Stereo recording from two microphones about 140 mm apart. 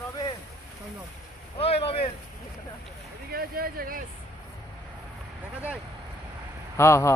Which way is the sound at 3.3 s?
90° right.